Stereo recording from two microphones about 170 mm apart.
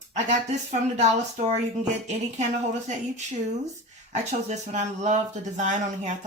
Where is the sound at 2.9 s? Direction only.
45° right (ahead or behind).